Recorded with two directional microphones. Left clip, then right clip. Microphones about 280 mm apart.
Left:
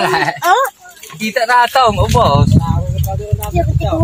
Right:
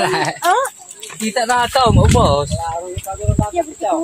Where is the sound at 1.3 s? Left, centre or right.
Centre.